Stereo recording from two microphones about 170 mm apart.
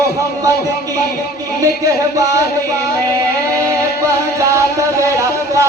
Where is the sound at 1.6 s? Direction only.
20° right (ahead or behind).